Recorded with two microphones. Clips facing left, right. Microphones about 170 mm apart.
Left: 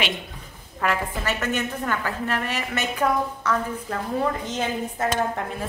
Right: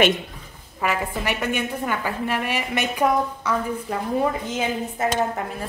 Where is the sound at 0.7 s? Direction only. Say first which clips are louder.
Right 1 dB; 10° right (ahead or behind).